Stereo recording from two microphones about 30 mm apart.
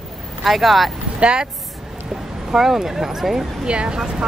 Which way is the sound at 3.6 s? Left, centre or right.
Right.